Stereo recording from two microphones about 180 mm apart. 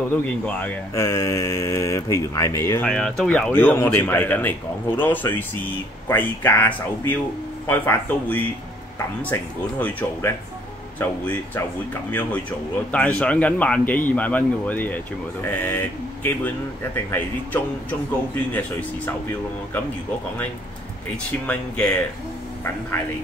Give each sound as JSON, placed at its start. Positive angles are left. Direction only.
{"t": 0.1, "sound": "speech", "side_deg": 10}
{"t": 2.9, "sound": "speech", "side_deg": 5}
{"t": 18.5, "sound": "speech", "side_deg": 10}
{"t": 21.5, "sound": "speech", "side_deg": 5}